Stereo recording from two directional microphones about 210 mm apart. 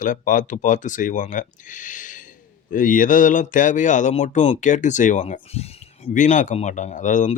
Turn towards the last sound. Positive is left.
turn(degrees=35)  # may be behind; listen again after turning